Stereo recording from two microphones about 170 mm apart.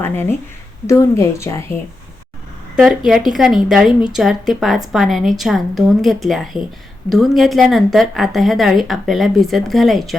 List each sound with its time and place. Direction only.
0.0 s speech: 15° left (ahead or behind)
2.7 s a woman's voice: centre (ahead or behind)